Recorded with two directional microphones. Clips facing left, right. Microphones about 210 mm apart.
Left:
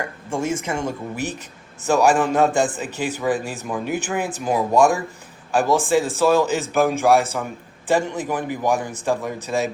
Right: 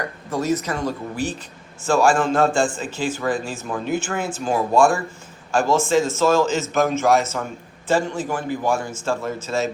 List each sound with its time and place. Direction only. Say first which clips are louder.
0.3 s a man's voice: right 2 dB; 25° left (ahead or behind)